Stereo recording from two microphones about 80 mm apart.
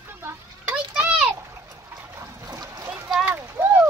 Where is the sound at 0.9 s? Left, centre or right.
Centre.